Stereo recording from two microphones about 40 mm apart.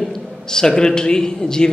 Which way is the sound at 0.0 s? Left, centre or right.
Centre.